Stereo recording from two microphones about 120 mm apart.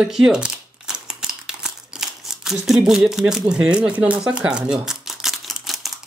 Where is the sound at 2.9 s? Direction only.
5° right (ahead or behind).